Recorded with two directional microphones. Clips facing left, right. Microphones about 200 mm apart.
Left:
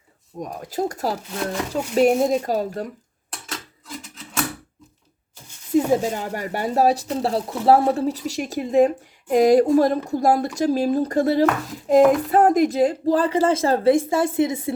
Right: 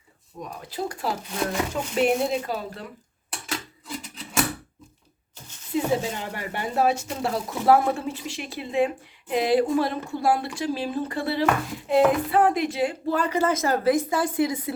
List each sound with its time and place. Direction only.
0.3 s speech: 45° left (ahead or behind)
5.7 s speech: 40° left (ahead or behind); by 14.7 s 25° left (ahead or behind)